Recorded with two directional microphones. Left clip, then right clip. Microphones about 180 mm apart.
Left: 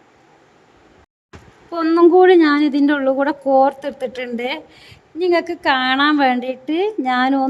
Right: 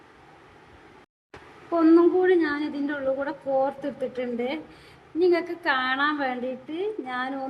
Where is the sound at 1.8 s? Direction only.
50° left (ahead or behind).